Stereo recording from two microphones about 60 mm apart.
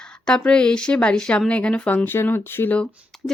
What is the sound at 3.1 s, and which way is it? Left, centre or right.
Beatboxing, centre.